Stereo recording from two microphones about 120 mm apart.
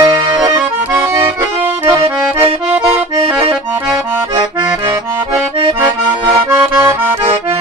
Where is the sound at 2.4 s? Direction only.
60° right (ahead or behind).